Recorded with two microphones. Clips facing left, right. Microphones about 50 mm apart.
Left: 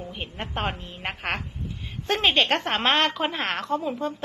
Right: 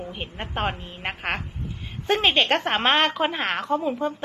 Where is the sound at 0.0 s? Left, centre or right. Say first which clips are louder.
Right 1 dB; centre.